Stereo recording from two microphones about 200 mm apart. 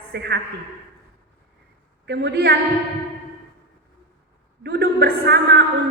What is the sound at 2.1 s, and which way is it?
Speech, 55° right (ahead or behind).